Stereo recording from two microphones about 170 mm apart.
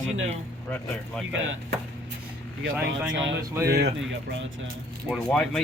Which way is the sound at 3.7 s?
75° right (ahead or behind).